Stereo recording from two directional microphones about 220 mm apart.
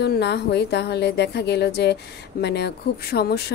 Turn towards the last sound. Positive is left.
turn(degrees=45)  # may be behind; listen again after turning